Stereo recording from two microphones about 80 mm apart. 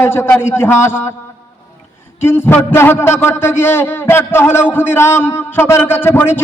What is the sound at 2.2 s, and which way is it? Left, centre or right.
A man's voice, left.